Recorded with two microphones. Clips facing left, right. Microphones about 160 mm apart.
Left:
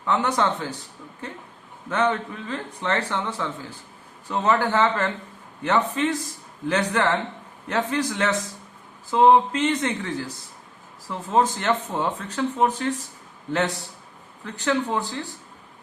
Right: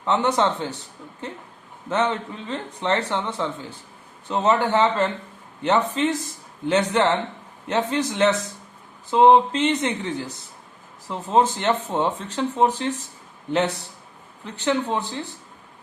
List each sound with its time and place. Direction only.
0.0 s speech: 25° right (ahead or behind)
1.9 s speech: 25° right (ahead or behind)
11.1 s speech: 25° right (ahead or behind)
14.4 s speech: 25° right (ahead or behind)